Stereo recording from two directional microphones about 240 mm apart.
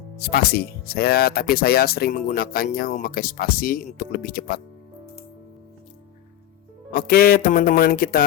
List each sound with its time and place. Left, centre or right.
0.2 s speech: left
6.9 s speech: left